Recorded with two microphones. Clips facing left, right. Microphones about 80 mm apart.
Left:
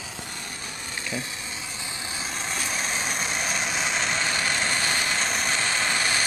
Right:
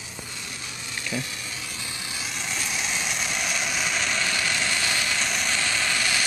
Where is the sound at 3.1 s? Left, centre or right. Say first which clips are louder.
Left 1 dB; left.